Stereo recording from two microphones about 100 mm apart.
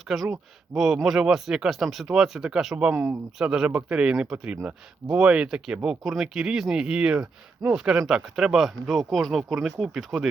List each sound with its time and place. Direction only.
0.1 s speech: centre (ahead or behind)
0.7 s speech: 30° right (ahead or behind)
1.0 s speech: 5° right (ahead or behind)